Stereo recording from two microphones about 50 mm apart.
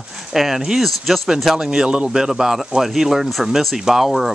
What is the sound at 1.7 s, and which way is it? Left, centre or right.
A man's voice, centre.